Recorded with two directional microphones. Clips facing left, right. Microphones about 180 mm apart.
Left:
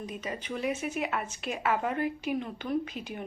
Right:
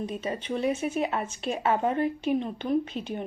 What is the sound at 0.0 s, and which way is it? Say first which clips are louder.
Speech: right 5 dB; 30° right (ahead or behind).